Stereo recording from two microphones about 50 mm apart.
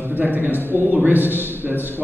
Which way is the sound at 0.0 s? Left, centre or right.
Right.